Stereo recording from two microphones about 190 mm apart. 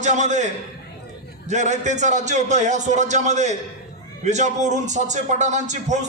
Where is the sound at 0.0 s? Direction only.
40° right (ahead or behind).